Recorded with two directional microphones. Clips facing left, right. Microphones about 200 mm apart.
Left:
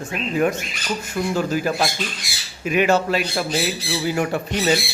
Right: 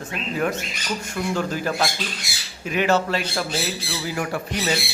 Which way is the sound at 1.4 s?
10° left (ahead or behind).